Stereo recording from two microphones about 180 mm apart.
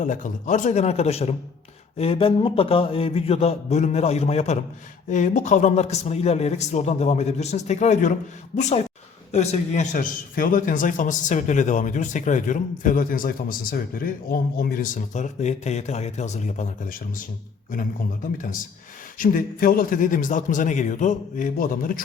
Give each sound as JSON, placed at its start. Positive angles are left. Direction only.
{"t": 0.0, "sound": "speech", "side_deg": 45}
{"t": 9.3, "sound": "a man's voice", "side_deg": 40}
{"t": 19.2, "sound": "a man's voice", "side_deg": 50}